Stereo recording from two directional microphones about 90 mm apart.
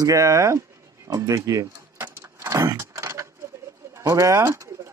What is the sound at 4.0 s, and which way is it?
Bird, 35° right (ahead or behind).